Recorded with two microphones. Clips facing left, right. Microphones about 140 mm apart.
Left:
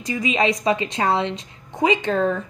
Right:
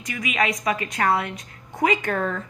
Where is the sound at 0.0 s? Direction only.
25° left (ahead or behind).